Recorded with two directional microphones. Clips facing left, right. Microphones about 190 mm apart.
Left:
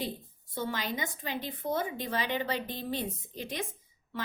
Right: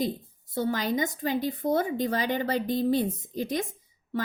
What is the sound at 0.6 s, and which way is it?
A woman's voice, 45° right (ahead or behind).